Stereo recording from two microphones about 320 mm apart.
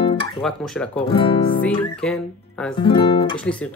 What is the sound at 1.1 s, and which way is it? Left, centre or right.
Speech, centre.